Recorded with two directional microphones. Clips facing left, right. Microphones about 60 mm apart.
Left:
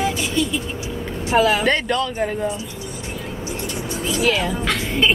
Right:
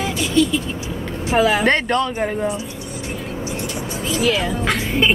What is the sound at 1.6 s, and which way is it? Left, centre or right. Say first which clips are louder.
Speech: right 2 dB; right.